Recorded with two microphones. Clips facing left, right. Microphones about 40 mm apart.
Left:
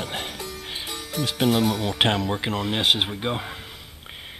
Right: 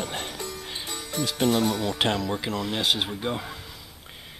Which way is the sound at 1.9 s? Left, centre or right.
Left.